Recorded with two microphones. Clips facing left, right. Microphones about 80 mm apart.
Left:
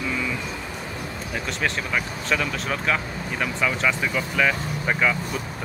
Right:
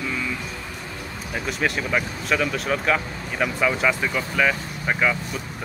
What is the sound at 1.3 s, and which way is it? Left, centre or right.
Speech, centre.